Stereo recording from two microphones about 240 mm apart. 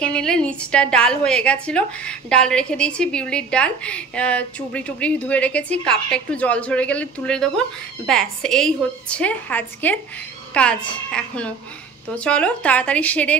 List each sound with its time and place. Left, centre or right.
0.0 s a woman's voice: centre